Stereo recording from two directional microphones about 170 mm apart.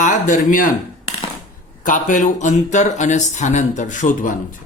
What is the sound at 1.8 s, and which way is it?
A man's voice, 50° left (ahead or behind).